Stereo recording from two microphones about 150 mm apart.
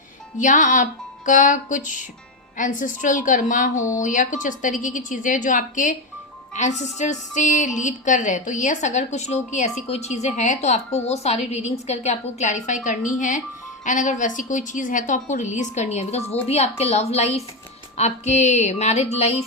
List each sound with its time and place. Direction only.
0.3 s speech: 60° left (ahead or behind)